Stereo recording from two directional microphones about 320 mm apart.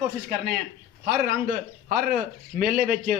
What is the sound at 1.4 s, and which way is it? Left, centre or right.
A man's voice, right.